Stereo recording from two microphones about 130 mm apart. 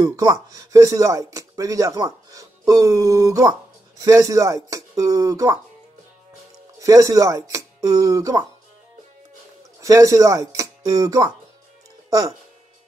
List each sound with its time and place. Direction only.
0.0 s speech: 30° right (ahead or behind)
6.8 s speech: 25° right (ahead or behind)
9.8 s speech: 25° right (ahead or behind)